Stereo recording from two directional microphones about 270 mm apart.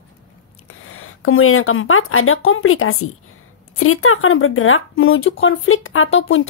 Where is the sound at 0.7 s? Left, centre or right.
Left.